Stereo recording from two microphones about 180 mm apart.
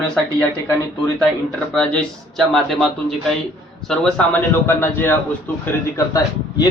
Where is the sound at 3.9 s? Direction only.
5° left (ahead or behind).